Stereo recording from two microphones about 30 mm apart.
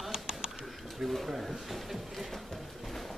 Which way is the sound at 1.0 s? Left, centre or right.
Centre.